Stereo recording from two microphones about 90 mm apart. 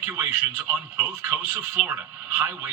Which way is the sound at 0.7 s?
25° right (ahead or behind).